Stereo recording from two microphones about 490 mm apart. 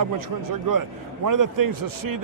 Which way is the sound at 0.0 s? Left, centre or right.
Right.